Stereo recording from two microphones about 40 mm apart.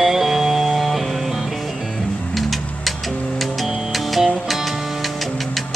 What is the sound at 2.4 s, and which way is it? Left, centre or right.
Music, centre.